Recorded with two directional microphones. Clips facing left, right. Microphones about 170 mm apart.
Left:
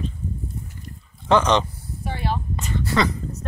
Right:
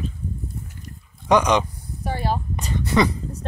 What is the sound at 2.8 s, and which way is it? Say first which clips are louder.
Speech: right 3 dB; 20° right (ahead or behind).